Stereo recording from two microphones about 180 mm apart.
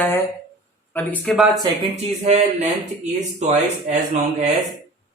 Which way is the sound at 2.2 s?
40° right (ahead or behind).